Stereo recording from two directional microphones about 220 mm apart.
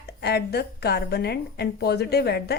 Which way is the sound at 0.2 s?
50° left (ahead or behind).